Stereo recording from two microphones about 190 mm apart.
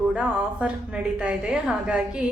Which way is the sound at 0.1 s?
5° right (ahead or behind).